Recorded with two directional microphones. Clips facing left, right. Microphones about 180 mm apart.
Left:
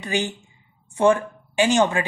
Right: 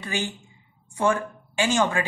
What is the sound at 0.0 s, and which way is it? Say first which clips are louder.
A woman's voice: left 4 dB; 20° left (ahead or behind).